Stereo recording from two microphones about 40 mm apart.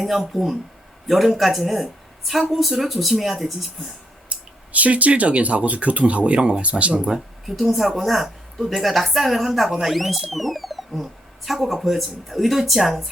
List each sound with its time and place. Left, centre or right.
0.0 s a woman's voice: centre
4.3 s speech: right
7.4 s a woman's voice: centre